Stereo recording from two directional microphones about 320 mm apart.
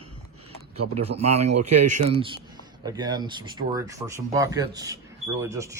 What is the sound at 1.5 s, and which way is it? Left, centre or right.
Speech, right.